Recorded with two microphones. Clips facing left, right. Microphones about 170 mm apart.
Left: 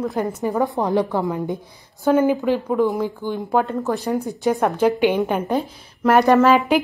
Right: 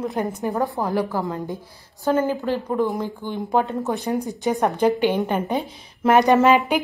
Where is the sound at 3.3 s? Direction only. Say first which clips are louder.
Even; centre (ahead or behind).